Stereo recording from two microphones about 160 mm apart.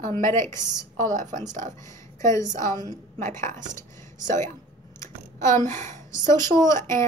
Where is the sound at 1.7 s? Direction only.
20° left (ahead or behind).